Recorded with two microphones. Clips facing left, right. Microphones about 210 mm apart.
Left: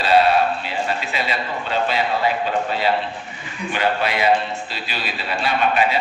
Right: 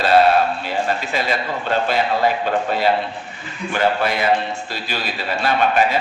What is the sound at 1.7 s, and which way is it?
Speech, 45° right (ahead or behind).